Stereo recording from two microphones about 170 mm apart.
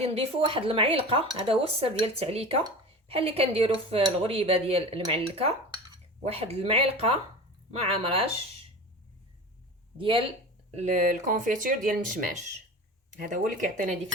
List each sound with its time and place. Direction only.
0.0 s speech: 35° right (ahead or behind)
10.0 s speech: 30° right (ahead or behind)
10.8 s speech: 45° right (ahead or behind)